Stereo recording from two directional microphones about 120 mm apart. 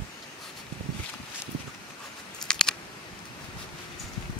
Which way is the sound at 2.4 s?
5° left (ahead or behind).